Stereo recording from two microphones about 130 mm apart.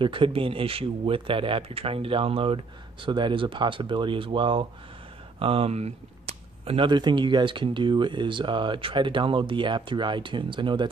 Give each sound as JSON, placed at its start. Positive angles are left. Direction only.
{"t": 0.0, "sound": "speech", "side_deg": -40}